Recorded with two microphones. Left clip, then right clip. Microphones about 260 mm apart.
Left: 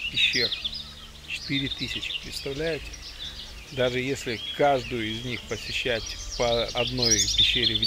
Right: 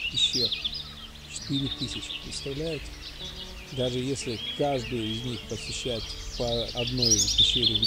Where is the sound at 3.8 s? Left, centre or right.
Left.